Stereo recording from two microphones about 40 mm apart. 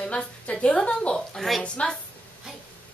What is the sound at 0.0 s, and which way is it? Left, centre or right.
A woman's voice, left.